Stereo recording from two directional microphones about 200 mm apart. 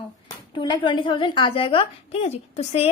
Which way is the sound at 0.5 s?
25° left (ahead or behind).